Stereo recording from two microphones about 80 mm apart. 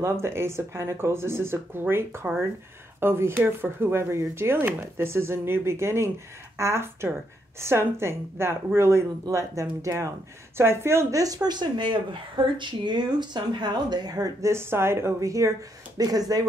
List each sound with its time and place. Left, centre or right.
0.0 s a woman's voice: right
14.5 s speech: right
16.0 s speech: right